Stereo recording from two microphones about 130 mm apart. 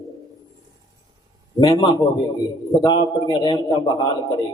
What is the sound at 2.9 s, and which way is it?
Speech, 30° left (ahead or behind).